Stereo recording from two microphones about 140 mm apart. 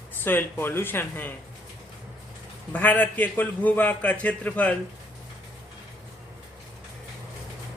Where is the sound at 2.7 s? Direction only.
10° left (ahead or behind).